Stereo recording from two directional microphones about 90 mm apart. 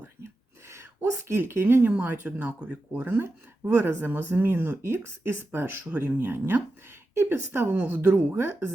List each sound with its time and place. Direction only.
1.3 s speech: 25° right (ahead or behind)
6.1 s speech: 25° right (ahead or behind)
8.4 s speech: 30° right (ahead or behind)